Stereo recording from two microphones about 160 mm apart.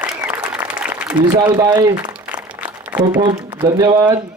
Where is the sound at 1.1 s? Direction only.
25° right (ahead or behind).